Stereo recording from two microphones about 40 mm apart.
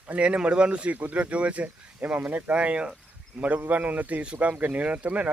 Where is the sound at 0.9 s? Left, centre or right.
Right.